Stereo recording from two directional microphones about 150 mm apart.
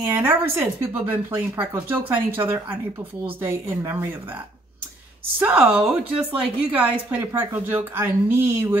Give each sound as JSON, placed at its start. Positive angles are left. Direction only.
{"t": 0.1, "sound": "a woman's voice", "side_deg": -15}
{"t": 5.4, "sound": "a woman's voice", "side_deg": -5}